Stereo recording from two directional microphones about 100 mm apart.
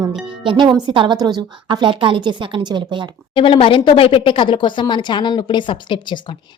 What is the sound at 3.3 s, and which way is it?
Speech, 55° left (ahead or behind).